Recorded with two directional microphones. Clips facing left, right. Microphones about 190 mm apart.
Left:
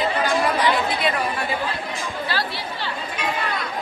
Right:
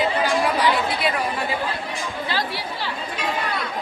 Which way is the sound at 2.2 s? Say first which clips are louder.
Right 2 dB; 15° right (ahead or behind).